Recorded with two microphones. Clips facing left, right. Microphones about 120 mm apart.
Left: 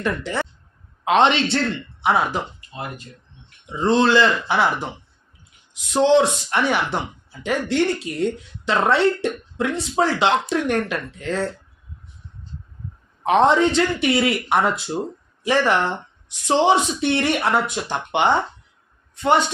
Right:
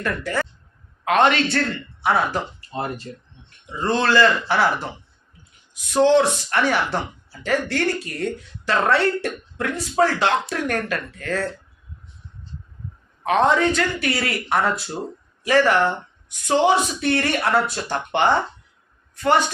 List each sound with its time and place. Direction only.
0.0 s speech: 20° left (ahead or behind)
2.6 s speech: 35° right (ahead or behind)
3.7 s speech: 20° left (ahead or behind)
5.9 s speech: 20° left (ahead or behind)
13.2 s a woman's voice: 25° left (ahead or behind)